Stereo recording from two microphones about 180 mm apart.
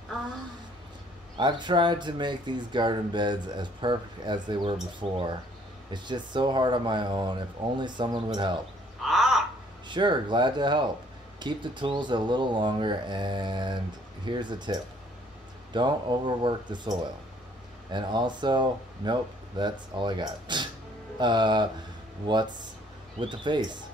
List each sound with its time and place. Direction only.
1.4 s speech: 25° right (ahead or behind)
5.9 s speech: 25° right (ahead or behind)
9.0 s crow: centre (ahead or behind)
9.8 s speech: 25° right (ahead or behind)
17.9 s speech: 25° right (ahead or behind)